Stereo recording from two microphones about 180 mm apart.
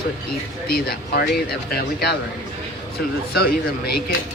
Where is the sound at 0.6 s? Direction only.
60° left (ahead or behind).